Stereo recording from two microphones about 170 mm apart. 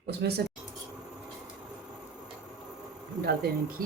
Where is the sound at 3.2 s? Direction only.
65° right (ahead or behind).